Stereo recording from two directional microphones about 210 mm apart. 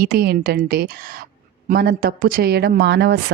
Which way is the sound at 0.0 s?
45° right (ahead or behind).